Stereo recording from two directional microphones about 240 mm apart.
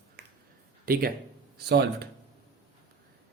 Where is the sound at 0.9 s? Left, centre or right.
Right.